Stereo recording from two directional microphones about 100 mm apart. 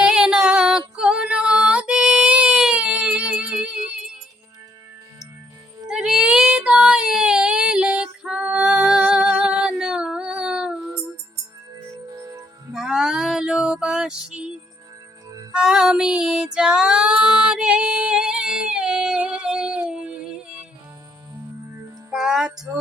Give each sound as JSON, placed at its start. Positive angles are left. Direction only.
{"t": 0.0, "sound": "female singing", "side_deg": -10}
{"t": 5.9, "sound": "child singing", "side_deg": -5}
{"t": 8.7, "sound": "music", "side_deg": -5}
{"t": 12.1, "sound": "music", "side_deg": -35}
{"t": 12.7, "sound": "female singing", "side_deg": -5}
{"t": 15.5, "sound": "female singing", "side_deg": -5}
{"t": 22.1, "sound": "music", "side_deg": -5}